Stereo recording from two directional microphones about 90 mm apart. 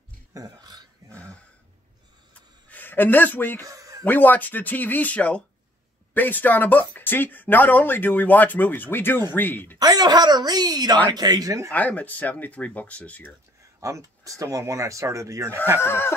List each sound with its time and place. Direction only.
0.3 s speech: 45° right (ahead or behind)
2.7 s a man's voice: 20° left (ahead or behind)
3.6 s a sound: 40° right (ahead or behind)
4.0 s speech: 20° left (ahead or behind)
9.8 s speech: 50° right (ahead or behind)
11.7 s speech: 15° left (ahead or behind)
13.7 s speech: 35° right (ahead or behind)
15.8 s speech: 25° left (ahead or behind)